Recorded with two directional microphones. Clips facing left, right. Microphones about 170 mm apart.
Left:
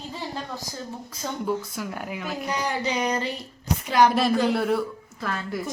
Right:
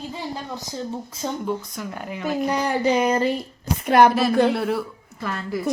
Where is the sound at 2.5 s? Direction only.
55° right (ahead or behind).